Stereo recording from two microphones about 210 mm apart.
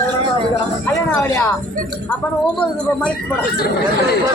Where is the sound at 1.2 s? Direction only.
15° left (ahead or behind).